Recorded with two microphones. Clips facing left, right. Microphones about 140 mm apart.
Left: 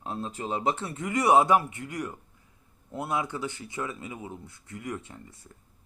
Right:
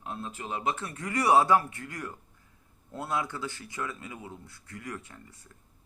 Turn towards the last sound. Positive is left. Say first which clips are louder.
# left 4 dB
turn(degrees=25)  # may be behind; listen again after turning